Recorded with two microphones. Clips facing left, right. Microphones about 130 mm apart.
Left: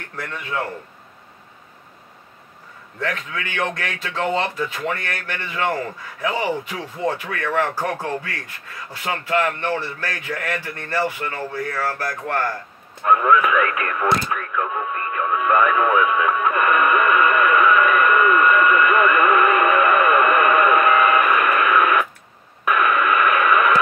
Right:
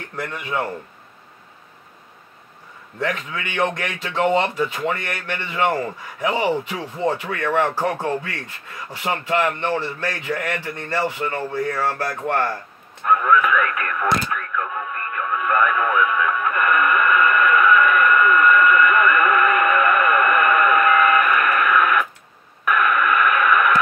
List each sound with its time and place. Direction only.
0.2 s speech: 15° right (ahead or behind)
3.0 s speech: 20° right (ahead or behind)
13.2 s radio: 20° left (ahead or behind)